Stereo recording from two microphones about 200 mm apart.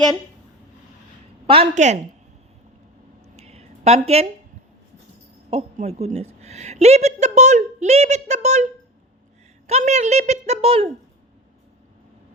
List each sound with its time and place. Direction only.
1.5 s a woman's voice: 30° right (ahead or behind)
3.3 s a sound: 30° right (ahead or behind)
5.5 s a woman's voice: 30° right (ahead or behind)